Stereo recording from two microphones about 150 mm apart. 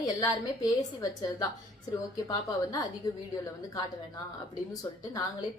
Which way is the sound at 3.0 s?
20° left (ahead or behind).